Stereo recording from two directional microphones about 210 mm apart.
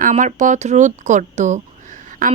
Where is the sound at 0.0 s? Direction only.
35° right (ahead or behind).